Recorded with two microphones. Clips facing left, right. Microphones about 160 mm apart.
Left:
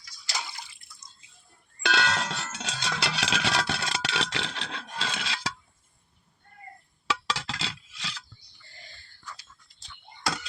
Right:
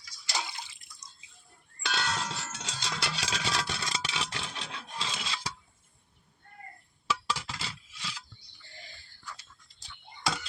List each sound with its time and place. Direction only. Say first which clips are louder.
0.5 s drip: even; 20° right (ahead or behind)
1.8 s music: left 6 dB; 80° left
7.1 s a sound: left 2 dB; 90° left